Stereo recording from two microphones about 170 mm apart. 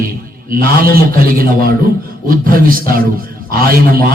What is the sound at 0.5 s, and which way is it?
A man's voice, 60° right (ahead or behind).